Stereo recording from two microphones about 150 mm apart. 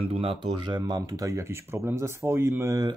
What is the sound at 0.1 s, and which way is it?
Speech, 40° right (ahead or behind).